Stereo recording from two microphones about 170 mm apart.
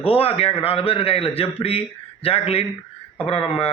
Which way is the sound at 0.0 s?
35° left (ahead or behind).